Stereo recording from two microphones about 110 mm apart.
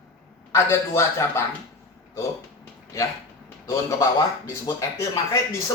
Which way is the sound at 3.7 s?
30° left (ahead or behind).